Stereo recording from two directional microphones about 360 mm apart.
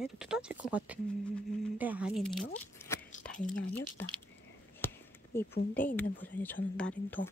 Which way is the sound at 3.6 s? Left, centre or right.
Left.